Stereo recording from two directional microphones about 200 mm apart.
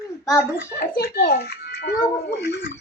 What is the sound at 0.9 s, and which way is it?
A child's voice, 45° left (ahead or behind).